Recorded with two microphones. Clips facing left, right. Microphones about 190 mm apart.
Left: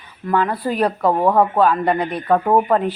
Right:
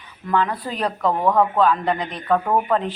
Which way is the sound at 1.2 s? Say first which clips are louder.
Left 2 dB; 30° left (ahead or behind).